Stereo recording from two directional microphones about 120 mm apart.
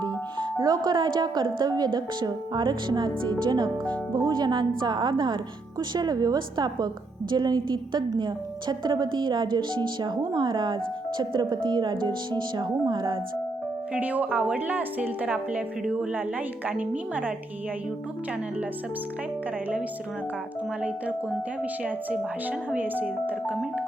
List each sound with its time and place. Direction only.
0.0 s music: 35° right (ahead or behind)
1.5 s a woman's voice: 35° right (ahead or behind)
13.9 s a woman's voice: 15° right (ahead or behind)
21.6 s a woman's voice: 10° right (ahead or behind)